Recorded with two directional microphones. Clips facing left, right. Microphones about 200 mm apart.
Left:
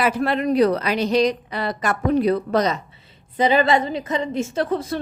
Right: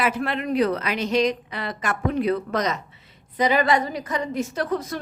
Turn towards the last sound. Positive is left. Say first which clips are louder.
# left 3 dB
turn(degrees=30)  # may be behind; listen again after turning